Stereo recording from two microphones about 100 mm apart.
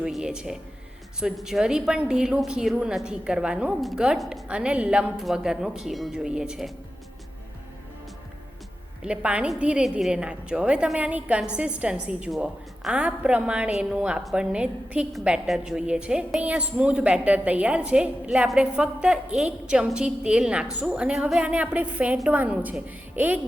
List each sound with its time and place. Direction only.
0.0 s a woman's voice: 5° right (ahead or behind)
9.0 s a woman's voice: 10° right (ahead or behind)
21.4 s a woman's voice: 15° right (ahead or behind)